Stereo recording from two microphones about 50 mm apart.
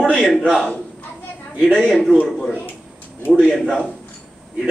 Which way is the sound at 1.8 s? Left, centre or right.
Centre.